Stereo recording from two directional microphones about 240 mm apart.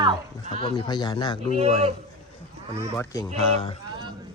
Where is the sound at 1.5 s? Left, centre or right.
Right.